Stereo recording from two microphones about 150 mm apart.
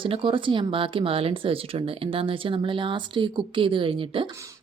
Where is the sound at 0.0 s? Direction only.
35° right (ahead or behind).